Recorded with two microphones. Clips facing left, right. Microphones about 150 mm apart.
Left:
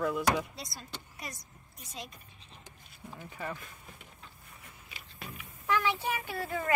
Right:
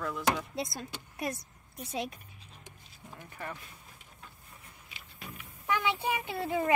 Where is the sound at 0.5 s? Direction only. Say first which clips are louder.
Right 9 dB; 50° right (ahead or behind).